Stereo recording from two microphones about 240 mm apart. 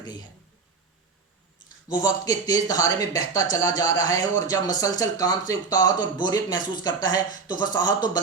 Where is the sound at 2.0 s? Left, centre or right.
Centre.